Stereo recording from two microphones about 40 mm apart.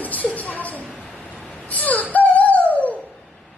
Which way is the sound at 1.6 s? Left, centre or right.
Left.